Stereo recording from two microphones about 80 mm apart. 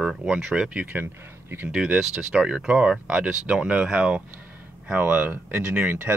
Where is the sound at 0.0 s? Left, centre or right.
Centre.